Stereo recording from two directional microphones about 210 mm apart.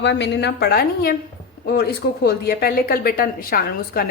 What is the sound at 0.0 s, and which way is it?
A woman's voice, 55° left (ahead or behind).